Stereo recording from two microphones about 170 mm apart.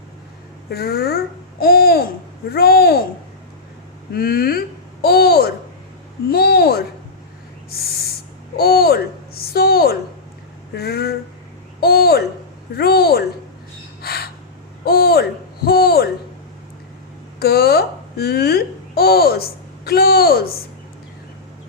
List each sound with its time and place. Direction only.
0.7 s a child's voice: 65° left (ahead or behind)
4.1 s a child's voice: 60° left (ahead or behind)
8.5 s a child's voice: 65° left (ahead or behind)
14.0 s gasp: 65° left (ahead or behind)
14.8 s a child's voice: 65° left (ahead or behind)
17.4 s a child's voice: 65° left (ahead or behind)